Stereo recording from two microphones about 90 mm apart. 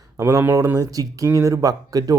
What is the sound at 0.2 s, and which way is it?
Speech, 35° right (ahead or behind).